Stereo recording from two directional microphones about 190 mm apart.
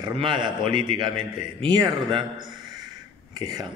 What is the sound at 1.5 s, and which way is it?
Speech, 25° right (ahead or behind).